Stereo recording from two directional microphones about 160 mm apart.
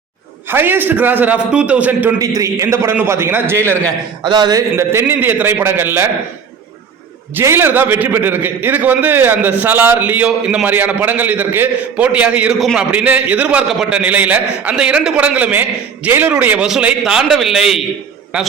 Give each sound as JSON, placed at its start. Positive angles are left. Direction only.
{"t": 0.4, "sound": "a man's voice", "side_deg": -15}
{"t": 2.1, "sound": "a man's voice", "side_deg": -20}
{"t": 4.2, "sound": "speech", "side_deg": -30}
{"t": 4.7, "sound": "a man's voice", "side_deg": -15}
{"t": 7.3, "sound": "a man's voice", "side_deg": -15}